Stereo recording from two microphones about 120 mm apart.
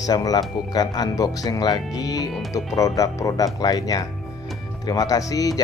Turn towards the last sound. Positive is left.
turn(degrees=30)  # may be behind; listen again after turning